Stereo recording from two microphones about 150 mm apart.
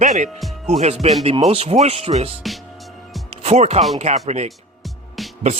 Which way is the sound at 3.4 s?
50° right (ahead or behind).